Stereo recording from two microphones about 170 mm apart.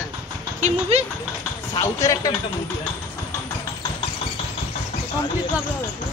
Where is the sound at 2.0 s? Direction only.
20° left (ahead or behind).